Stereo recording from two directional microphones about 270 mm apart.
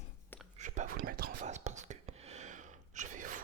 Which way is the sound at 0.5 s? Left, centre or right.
Right.